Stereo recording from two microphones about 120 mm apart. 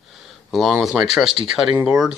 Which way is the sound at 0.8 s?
5° right (ahead or behind).